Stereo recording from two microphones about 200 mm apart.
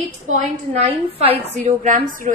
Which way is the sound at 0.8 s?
30° right (ahead or behind).